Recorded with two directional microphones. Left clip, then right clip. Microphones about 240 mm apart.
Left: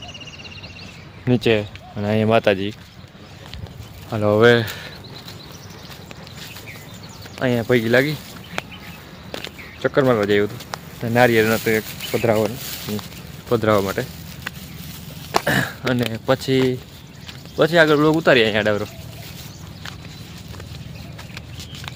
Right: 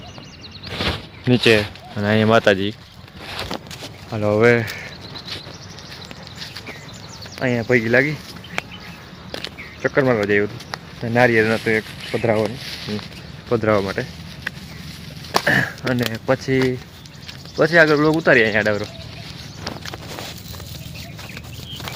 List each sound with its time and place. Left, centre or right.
1.2 s speech: centre
4.1 s speech: centre
7.3 s speech: centre
8.6 s a sound: centre
9.3 s speech: centre
12.5 s speech: left
13.5 s speech: centre
15.3 s a sound: centre
16.2 s speech: centre